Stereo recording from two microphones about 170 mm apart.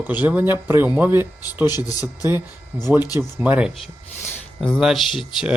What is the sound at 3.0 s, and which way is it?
Speech, 20° left (ahead or behind).